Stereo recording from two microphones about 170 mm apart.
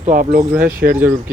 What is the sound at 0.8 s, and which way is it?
Speech, 80° right.